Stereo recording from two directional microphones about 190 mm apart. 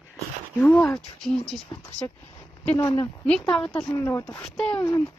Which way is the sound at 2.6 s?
10° left (ahead or behind).